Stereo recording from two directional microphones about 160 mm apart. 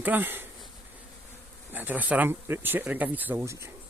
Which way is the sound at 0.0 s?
10° right (ahead or behind).